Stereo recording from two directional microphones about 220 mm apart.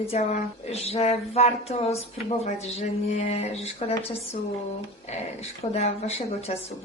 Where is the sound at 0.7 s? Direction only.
30° left (ahead or behind).